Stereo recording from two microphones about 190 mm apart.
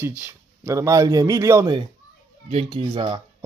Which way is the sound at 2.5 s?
30° right (ahead or behind).